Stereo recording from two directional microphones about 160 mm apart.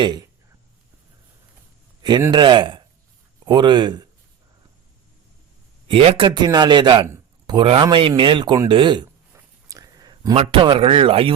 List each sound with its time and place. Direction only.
0.0 s speech: 25° right (ahead or behind)
2.0 s a sound: 25° right (ahead or behind)
2.3 s speech: 30° right (ahead or behind)
5.9 s a man's voice: 35° right (ahead or behind)
9.3 s a sound: 20° right (ahead or behind)
10.3 s a man's voice: 35° right (ahead or behind)